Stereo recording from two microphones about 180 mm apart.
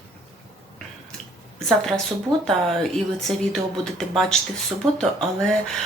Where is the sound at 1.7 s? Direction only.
Centre (ahead or behind).